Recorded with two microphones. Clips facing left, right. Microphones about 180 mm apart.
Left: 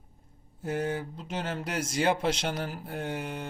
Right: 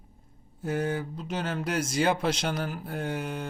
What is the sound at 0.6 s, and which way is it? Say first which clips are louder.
Speech: right 2 dB; 25° left (ahead or behind).